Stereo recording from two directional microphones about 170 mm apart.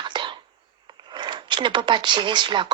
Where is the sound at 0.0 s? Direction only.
30° right (ahead or behind).